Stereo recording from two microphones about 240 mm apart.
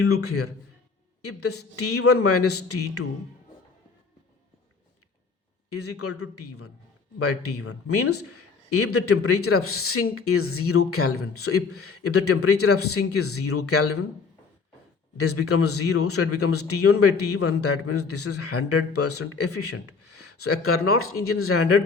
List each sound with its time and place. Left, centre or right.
0.0 s a man's voice: left
5.7 s a man's voice: left
15.2 s a man's voice: left